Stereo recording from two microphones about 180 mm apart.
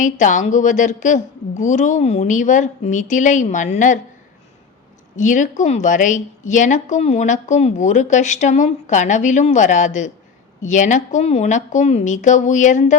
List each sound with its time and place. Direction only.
0.0 s a woman's voice: 45° left (ahead or behind)
5.1 s a woman's voice: 45° left (ahead or behind)